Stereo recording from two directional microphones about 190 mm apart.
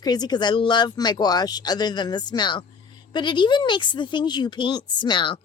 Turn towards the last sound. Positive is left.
turn(degrees=25)  # may be behind; listen again after turning